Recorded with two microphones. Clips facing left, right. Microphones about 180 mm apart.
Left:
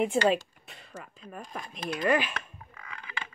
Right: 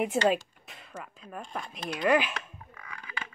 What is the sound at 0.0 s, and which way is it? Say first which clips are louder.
Speech: left 1 dB; centre (ahead or behind).